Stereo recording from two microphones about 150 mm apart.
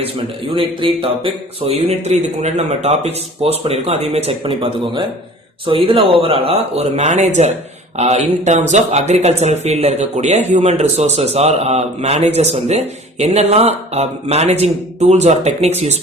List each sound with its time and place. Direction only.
0.5 s speech: 35° right (ahead or behind)